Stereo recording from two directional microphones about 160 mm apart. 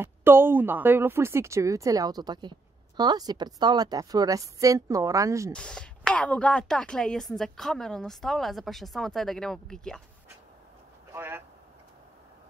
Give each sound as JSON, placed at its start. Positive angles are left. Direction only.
{"t": 0.0, "sound": "a woman's voice", "side_deg": -15}
{"t": 5.5, "sound": "a woman's voice", "side_deg": 5}
{"t": 11.1, "sound": "speech", "side_deg": -15}